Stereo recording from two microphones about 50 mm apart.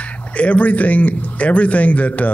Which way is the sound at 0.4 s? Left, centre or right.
Left.